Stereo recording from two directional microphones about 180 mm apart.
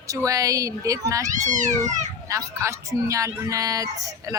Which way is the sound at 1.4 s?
45° right (ahead or behind).